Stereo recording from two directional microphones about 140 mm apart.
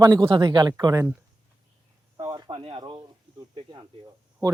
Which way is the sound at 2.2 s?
30° right (ahead or behind).